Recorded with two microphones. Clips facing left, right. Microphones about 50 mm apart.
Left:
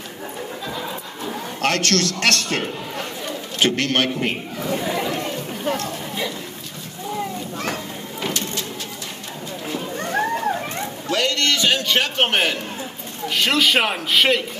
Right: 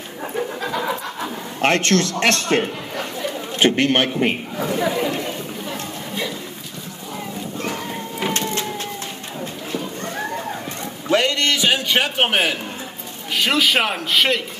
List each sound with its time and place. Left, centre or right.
0.6 s pant: right
1.6 s a man's voice: right
4.6 s speech: right
8.3 s vehicle: right
11.1 s a sound: right
13.3 s a man's voice: centre